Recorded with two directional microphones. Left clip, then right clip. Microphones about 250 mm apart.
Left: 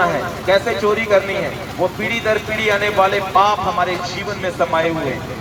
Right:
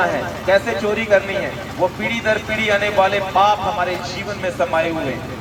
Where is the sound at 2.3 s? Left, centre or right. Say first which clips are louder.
Even; left.